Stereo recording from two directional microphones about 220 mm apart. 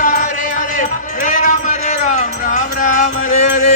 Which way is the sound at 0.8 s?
35° left (ahead or behind).